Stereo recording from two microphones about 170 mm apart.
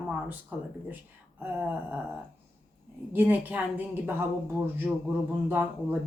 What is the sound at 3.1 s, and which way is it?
Speech, 10° right (ahead or behind).